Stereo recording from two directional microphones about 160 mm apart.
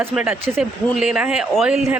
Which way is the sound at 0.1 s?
5° right (ahead or behind).